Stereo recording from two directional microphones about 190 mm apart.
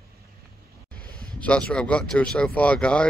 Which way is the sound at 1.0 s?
5° left (ahead or behind).